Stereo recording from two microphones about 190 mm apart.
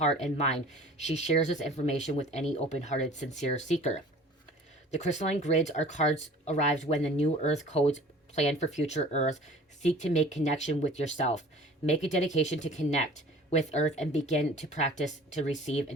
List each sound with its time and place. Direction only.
0.2 s speech: 35° left (ahead or behind)